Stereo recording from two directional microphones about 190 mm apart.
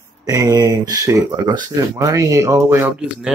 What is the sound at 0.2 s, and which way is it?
Speech, 20° right (ahead or behind).